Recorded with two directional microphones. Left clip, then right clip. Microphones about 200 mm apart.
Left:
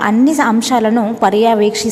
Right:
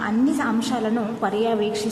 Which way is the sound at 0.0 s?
40° left (ahead or behind).